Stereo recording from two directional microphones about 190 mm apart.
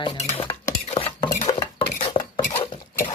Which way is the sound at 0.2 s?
30° left (ahead or behind).